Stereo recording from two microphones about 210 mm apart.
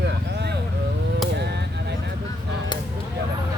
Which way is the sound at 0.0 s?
55° right (ahead or behind).